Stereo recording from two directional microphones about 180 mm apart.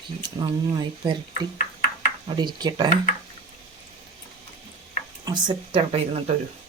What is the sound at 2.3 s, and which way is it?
Speech, 25° right (ahead or behind).